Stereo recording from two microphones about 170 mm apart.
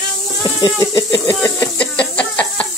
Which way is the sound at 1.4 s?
10° left (ahead or behind).